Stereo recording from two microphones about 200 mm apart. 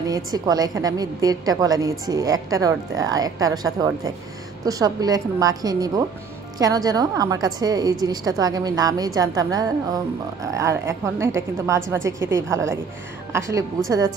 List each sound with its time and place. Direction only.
0.0 s a woman's voice: 20° right (ahead or behind)